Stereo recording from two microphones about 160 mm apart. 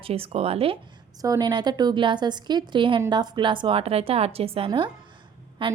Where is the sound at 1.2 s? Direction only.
20° right (ahead or behind).